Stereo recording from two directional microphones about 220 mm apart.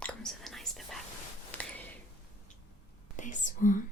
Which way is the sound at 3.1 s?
35° left (ahead or behind).